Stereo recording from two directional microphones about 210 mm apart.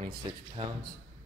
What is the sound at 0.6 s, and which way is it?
Speech, 25° right (ahead or behind).